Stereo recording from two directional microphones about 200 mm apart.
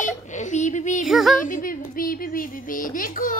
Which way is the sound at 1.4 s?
45° left (ahead or behind).